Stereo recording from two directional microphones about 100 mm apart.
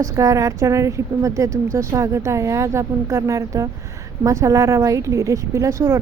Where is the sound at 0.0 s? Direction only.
30° right (ahead or behind).